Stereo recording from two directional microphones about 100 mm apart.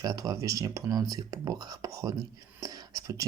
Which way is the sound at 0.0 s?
35° right (ahead or behind).